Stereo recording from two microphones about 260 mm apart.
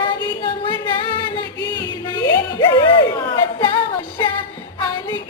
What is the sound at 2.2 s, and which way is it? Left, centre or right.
Music, centre.